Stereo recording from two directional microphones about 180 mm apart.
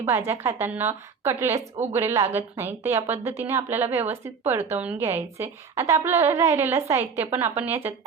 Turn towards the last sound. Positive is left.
turn(degrees=-10)  # may be behind; listen again after turning